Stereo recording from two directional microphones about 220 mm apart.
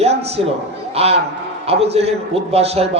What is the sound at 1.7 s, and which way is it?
Speech, 25° right (ahead or behind).